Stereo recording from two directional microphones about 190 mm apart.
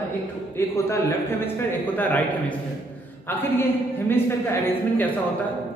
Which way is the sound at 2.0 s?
10° left (ahead or behind).